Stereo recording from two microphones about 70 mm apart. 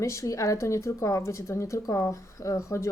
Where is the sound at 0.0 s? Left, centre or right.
Left.